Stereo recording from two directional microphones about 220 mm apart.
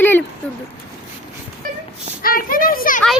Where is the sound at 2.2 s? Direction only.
40° left (ahead or behind).